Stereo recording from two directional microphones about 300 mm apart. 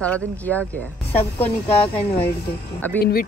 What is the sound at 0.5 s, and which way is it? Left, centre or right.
Speech, centre.